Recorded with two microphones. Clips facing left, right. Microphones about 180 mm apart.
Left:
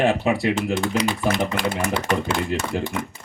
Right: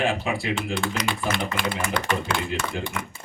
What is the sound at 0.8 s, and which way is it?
Speech, 35° left (ahead or behind).